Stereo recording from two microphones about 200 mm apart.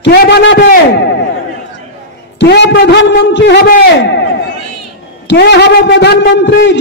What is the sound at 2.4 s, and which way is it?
A man's voice, 55° left (ahead or behind).